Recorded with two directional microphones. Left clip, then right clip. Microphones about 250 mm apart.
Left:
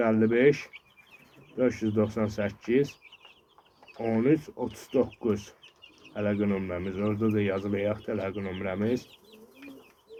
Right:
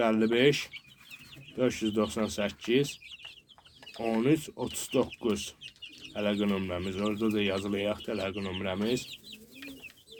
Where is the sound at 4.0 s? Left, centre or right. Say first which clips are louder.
Left 2 dB; centre.